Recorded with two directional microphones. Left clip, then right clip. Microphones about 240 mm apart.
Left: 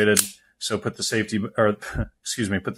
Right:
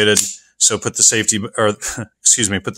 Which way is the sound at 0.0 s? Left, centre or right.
Right.